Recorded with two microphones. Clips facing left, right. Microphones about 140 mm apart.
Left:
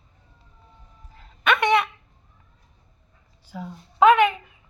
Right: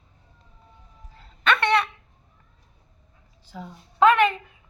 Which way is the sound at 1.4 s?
15° left (ahead or behind).